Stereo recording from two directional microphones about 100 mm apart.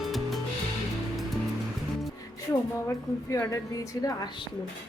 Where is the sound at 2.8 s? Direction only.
30° left (ahead or behind).